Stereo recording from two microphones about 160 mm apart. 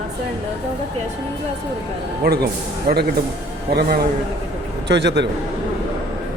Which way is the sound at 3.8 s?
75° right (ahead or behind).